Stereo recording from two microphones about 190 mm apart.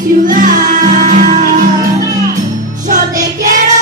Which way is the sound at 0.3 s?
45° right (ahead or behind).